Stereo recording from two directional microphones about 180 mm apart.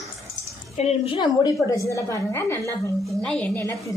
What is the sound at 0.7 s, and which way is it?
A woman's voice, 35° left (ahead or behind).